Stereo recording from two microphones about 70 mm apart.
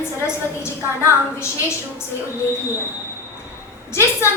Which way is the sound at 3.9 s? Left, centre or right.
Left.